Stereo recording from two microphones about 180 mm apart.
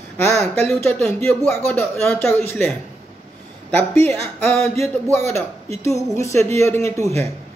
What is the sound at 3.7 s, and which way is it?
Speech, 10° left (ahead or behind).